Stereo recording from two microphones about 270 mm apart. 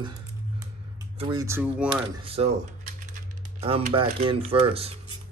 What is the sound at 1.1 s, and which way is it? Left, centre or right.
Speech, centre.